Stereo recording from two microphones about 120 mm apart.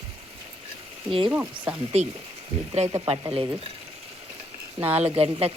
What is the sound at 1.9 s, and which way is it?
Speech, 65° right (ahead or behind).